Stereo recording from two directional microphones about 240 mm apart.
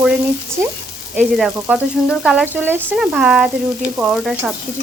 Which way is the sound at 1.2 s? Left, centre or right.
Centre.